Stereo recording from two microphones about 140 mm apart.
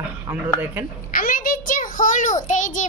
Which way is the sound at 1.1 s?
85° left.